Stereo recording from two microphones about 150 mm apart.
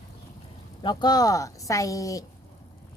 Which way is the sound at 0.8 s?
30° left (ahead or behind).